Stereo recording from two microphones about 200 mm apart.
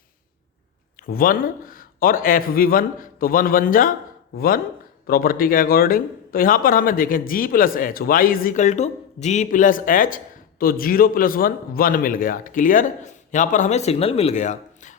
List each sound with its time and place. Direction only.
0.9 s speech: 45° left (ahead or behind)